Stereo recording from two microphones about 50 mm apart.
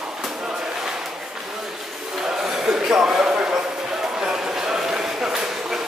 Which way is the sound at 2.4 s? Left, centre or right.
Centre.